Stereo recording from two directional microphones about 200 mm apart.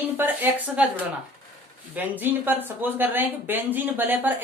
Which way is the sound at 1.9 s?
10° right (ahead or behind).